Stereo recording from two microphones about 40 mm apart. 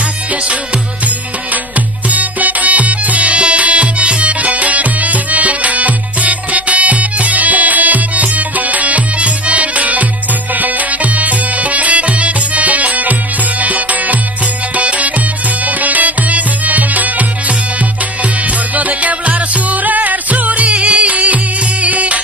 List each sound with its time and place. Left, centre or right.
2.0 s music: right
18.7 s music: right